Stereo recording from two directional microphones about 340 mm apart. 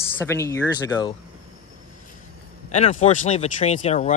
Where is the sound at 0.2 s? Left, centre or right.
Centre.